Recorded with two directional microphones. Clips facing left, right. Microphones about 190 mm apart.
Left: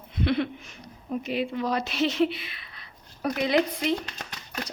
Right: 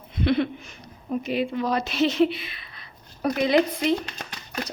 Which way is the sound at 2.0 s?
25° right (ahead or behind).